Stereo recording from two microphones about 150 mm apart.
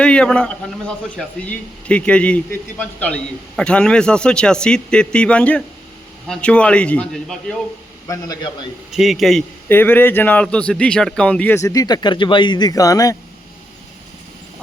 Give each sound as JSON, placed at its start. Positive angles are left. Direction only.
{"t": 0.0, "sound": "a man's voice", "side_deg": 5}
{"t": 8.0, "sound": "speech", "side_deg": 25}
{"t": 8.9, "sound": "a man's voice", "side_deg": 0}
{"t": 9.6, "sound": "a man's voice", "side_deg": 15}
{"t": 11.5, "sound": "speech", "side_deg": 20}